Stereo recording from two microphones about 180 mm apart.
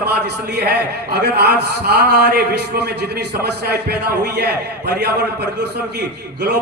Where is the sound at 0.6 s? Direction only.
65° right (ahead or behind).